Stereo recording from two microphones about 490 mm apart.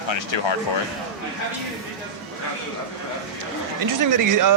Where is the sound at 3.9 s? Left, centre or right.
Right.